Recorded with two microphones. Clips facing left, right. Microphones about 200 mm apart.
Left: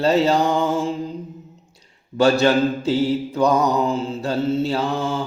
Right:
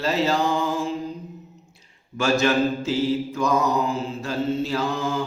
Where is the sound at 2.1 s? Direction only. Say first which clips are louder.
Left 5 dB; 35° left (ahead or behind).